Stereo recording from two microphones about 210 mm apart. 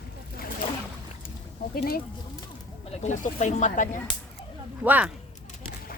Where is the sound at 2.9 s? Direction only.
35° left (ahead or behind).